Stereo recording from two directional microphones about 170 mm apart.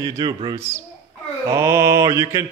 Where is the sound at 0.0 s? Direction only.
25° right (ahead or behind).